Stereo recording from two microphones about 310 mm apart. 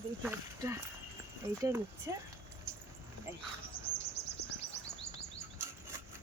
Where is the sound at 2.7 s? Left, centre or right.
Centre.